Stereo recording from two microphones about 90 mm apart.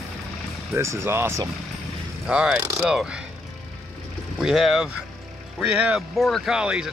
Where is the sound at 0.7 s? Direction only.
30° right (ahead or behind).